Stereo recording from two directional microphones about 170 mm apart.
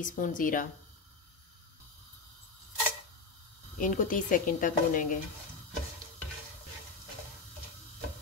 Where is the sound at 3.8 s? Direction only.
50° left (ahead or behind).